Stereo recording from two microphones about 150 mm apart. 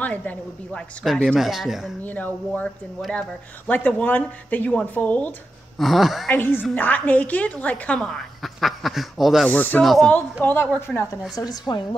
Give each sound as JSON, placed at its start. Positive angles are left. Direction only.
{"t": 0.0, "sound": "a woman's voice", "side_deg": 10}
{"t": 2.0, "sound": "a woman's voice", "side_deg": 10}
{"t": 5.8, "sound": "speech", "side_deg": 0}
{"t": 6.3, "sound": "a woman's voice", "side_deg": 15}
{"t": 9.5, "sound": "a woman's voice", "side_deg": 10}
{"t": 10.4, "sound": "a woman's voice", "side_deg": 15}
{"t": 11.3, "sound": "speech", "side_deg": 25}